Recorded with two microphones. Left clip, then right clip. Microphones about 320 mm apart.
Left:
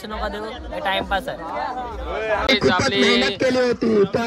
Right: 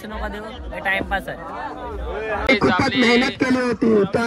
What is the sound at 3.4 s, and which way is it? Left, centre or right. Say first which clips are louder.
Speech: left 1 dB; centre.